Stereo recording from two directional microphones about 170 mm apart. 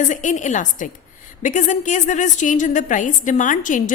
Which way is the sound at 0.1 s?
45° left (ahead or behind).